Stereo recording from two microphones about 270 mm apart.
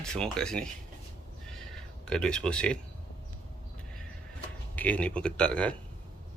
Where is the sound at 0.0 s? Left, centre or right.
Centre.